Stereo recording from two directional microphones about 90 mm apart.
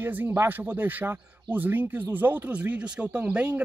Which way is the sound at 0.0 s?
20° right (ahead or behind).